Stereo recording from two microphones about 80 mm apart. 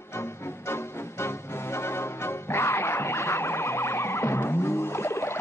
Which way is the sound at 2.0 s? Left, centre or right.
Left.